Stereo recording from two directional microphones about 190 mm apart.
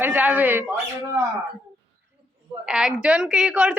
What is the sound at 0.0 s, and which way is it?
A woman's voice, 10° right (ahead or behind).